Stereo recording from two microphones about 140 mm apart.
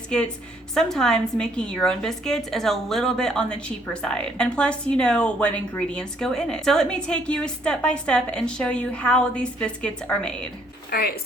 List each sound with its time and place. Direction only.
0.7 s a woman's voice: 5° left (ahead or behind)
10.9 s speech: 90° left